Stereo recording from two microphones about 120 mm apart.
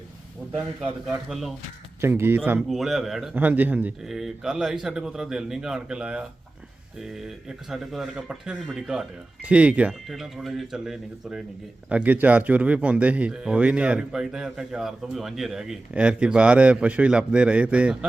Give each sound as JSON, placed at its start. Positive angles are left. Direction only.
{"t": 0.5, "sound": "speech", "side_deg": -15}
{"t": 1.0, "sound": "speech", "side_deg": 0}
{"t": 2.0, "sound": "speech", "side_deg": -20}
{"t": 2.6, "sound": "speech", "side_deg": 0}
{"t": 3.3, "sound": "speech", "side_deg": -15}
{"t": 4.0, "sound": "speech", "side_deg": 0}